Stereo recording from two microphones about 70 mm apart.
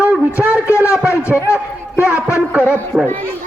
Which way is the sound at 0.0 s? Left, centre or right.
Centre.